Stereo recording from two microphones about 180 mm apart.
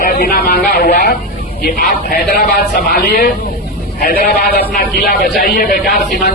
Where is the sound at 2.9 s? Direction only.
60° left (ahead or behind).